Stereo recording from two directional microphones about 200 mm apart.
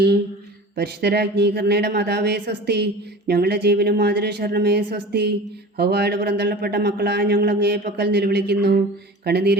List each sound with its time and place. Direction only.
0.8 s speech: 55° right (ahead or behind)